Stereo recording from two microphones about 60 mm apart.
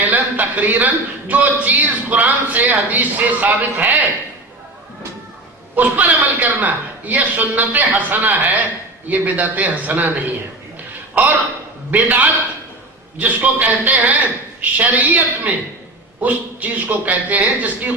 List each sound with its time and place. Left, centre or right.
0.0 s a man's voice: right
5.7 s a man's voice: right
11.1 s a man's voice: right